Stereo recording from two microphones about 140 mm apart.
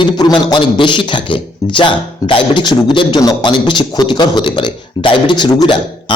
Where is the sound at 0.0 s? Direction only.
30° left (ahead or behind).